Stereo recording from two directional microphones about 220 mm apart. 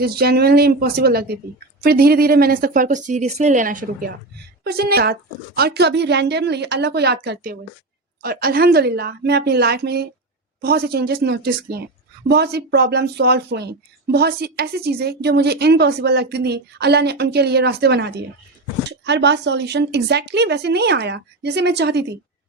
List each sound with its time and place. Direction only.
0.0 s speech: 45° right (ahead or behind)